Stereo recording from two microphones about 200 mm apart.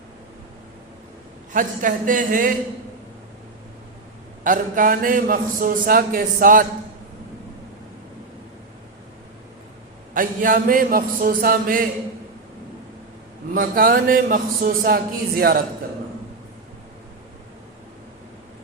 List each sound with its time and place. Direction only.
1.5 s speech: 40° right (ahead or behind)
4.4 s a man's voice: 40° right (ahead or behind)
10.2 s a man's voice: 45° right (ahead or behind)
13.5 s a man's voice: 45° right (ahead or behind)